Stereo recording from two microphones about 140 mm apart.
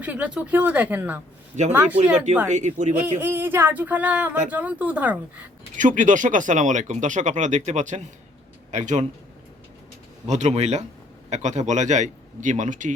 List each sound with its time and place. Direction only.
0.0 s speech: 10° right (ahead or behind)
1.5 s speech: 60° right (ahead or behind)
2.9 s speech: 10° right (ahead or behind)
5.7 s speech: 65° right (ahead or behind)
10.2 s speech: 55° right (ahead or behind)